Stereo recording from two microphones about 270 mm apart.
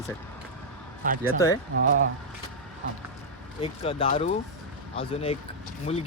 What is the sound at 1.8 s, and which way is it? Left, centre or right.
Speech, right.